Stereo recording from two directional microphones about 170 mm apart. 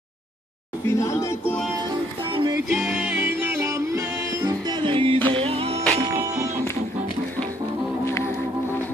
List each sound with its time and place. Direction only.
0.8 s speech: 15° left (ahead or behind)
2.3 s music: 25° right (ahead or behind)
2.7 s music: 5° right (ahead or behind); by 5.9 s 35° right (ahead or behind)
6.1 s music: 20° right (ahead or behind)